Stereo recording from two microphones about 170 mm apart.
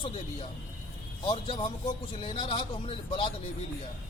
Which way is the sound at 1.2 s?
30° left (ahead or behind).